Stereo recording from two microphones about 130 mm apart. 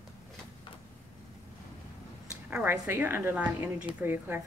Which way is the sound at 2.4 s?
10° right (ahead or behind).